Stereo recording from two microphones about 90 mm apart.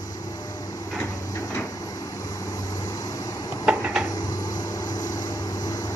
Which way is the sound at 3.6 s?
15° right (ahead or behind).